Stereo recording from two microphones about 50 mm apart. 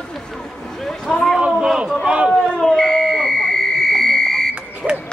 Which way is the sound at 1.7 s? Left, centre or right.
Centre.